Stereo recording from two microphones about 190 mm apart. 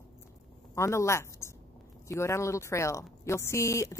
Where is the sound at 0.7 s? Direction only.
15° left (ahead or behind).